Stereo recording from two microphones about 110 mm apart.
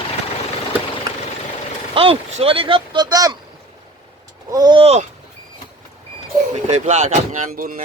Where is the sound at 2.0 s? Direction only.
60° right (ahead or behind); by 3.3 s 35° right (ahead or behind).